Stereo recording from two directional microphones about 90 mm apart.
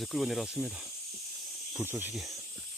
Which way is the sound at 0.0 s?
Centre (ahead or behind).